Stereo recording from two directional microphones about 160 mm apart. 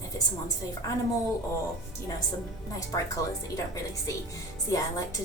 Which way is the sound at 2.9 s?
20° left (ahead or behind).